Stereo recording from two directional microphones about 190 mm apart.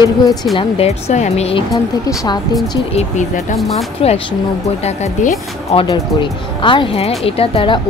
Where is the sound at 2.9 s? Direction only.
35° left (ahead or behind).